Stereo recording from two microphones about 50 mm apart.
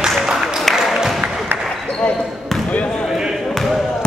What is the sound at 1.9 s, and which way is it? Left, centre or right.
Basketball bounce, left.